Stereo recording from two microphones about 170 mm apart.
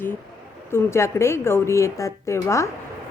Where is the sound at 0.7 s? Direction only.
15° left (ahead or behind).